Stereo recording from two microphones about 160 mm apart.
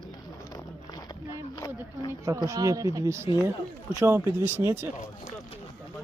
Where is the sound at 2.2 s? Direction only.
20° right (ahead or behind).